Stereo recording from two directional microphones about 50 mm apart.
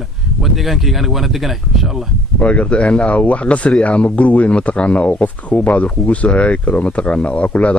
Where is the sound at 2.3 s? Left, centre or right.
Left.